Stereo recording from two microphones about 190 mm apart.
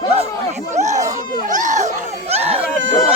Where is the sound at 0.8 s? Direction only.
35° right (ahead or behind).